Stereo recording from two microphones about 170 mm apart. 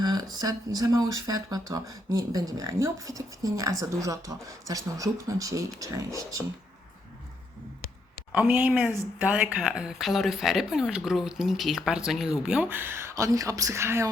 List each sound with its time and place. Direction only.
0.0 s speech: 25° right (ahead or behind)
8.3 s speech: 10° right (ahead or behind)